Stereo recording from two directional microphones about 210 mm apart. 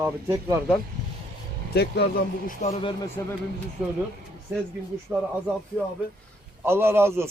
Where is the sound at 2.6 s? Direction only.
25° left (ahead or behind).